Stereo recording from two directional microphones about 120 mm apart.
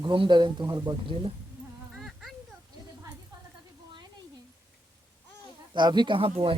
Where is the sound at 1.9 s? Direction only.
Centre (ahead or behind).